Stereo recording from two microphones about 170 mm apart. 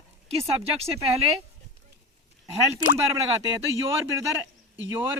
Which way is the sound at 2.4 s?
20° right (ahead or behind).